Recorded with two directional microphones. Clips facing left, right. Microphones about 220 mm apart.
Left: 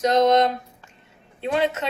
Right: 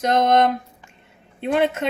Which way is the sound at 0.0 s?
55° right (ahead or behind).